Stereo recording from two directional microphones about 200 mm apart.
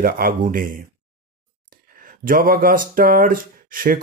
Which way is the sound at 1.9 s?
45° right (ahead or behind).